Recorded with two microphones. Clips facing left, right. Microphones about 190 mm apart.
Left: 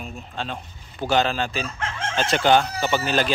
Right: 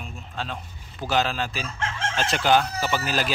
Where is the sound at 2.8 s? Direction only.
25° left (ahead or behind).